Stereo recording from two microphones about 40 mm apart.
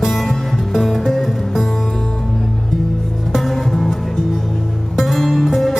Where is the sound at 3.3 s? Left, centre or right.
Centre.